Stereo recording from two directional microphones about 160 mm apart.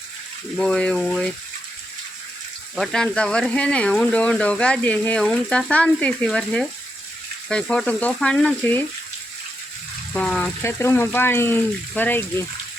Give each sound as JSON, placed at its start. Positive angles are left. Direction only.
{"t": 0.5, "sound": "speech", "side_deg": 5}
{"t": 2.7, "sound": "speech", "side_deg": 5}
{"t": 10.1, "sound": "speech", "side_deg": 5}